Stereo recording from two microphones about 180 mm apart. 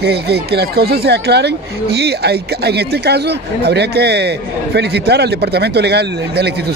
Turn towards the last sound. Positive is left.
turn(degrees=-65)  # may be behind; listen again after turning